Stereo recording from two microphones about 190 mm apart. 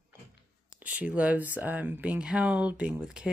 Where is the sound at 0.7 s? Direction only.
5° right (ahead or behind).